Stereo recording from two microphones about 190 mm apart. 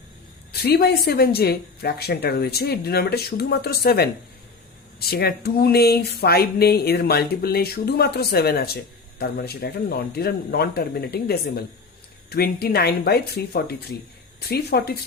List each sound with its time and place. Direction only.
0.5 s speech: 55° left (ahead or behind)